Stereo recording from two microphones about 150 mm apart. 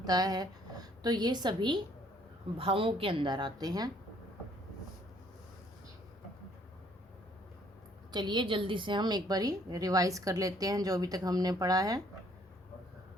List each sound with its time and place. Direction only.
0.0 s a woman's voice: 25° right (ahead or behind)
8.1 s a woman's voice: 30° right (ahead or behind)